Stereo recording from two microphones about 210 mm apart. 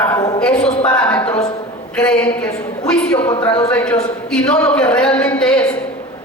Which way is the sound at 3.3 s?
20° left (ahead or behind).